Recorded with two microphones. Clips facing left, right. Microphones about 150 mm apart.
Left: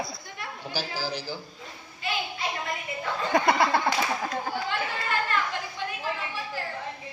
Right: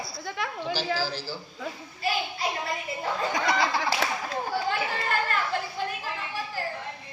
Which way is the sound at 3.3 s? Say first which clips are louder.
Left 6 dB; 55° left (ahead or behind).